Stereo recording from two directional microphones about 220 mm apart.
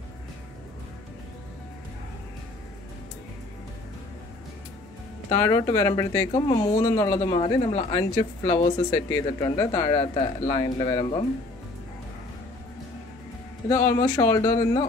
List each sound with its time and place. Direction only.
5.3 s speech: 15° left (ahead or behind)
13.7 s speech: 15° left (ahead or behind)